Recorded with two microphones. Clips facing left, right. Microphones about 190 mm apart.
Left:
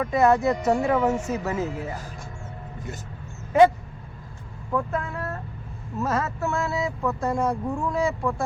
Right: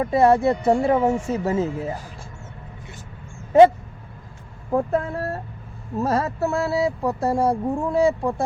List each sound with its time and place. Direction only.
0.0 s speech: 30° right (ahead or behind)
4.7 s speech: 35° right (ahead or behind)